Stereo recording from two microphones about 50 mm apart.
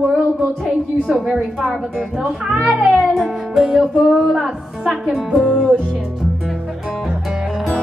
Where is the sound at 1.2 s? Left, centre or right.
Centre.